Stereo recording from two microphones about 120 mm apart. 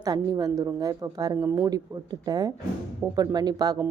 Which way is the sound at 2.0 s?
35° right (ahead or behind).